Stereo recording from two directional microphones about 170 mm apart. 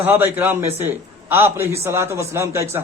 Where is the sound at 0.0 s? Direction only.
10° right (ahead or behind).